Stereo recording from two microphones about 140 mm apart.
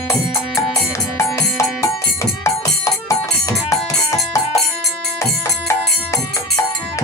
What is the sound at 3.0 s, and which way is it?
Music, 25° left (ahead or behind).